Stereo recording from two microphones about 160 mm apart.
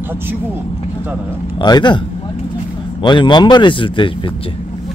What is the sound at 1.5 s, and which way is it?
Speech, 25° left (ahead or behind).